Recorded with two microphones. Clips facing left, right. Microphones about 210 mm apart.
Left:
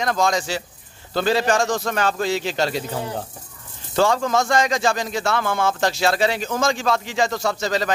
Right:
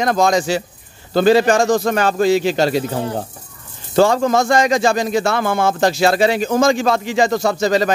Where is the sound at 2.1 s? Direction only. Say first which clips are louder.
Right 8 dB; 10° right (ahead or behind).